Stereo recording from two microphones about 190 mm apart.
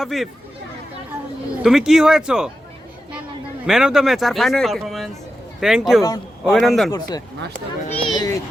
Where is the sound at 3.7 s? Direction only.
5° right (ahead or behind).